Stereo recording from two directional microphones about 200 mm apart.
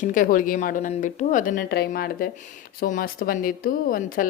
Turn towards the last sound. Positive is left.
turn(degrees=45)  # may be behind; listen again after turning